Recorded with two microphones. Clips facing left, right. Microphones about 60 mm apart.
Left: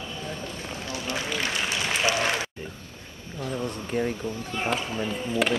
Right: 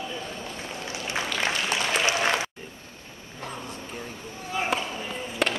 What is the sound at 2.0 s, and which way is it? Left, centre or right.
Applause, centre.